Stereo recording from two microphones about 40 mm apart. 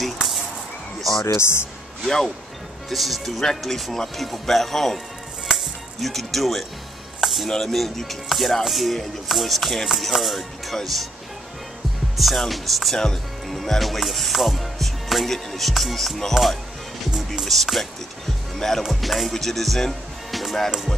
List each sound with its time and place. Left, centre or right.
0.0 s a sound: centre
1.4 s a man's voice: left
2.0 s speech: centre
2.9 s music: centre
7.2 s a sound: centre
7.4 s speech: centre
7.7 s music: centre
12.2 s music: centre
12.9 s speech: centre
13.5 s music: centre
17.4 s music: centre
18.8 s speech: centre